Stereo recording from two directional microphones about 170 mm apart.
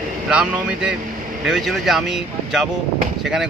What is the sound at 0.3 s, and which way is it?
Speech, 5° right (ahead or behind).